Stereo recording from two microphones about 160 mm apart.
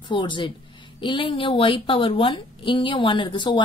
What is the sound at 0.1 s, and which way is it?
A woman's voice, 30° left (ahead or behind).